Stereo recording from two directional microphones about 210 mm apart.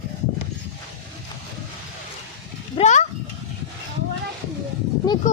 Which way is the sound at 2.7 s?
35° left (ahead or behind).